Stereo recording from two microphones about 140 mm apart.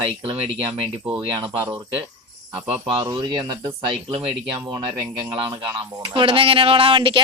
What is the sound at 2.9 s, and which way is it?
Speech, 35° right (ahead or behind).